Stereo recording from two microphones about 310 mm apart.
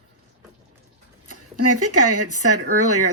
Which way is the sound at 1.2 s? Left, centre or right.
Right.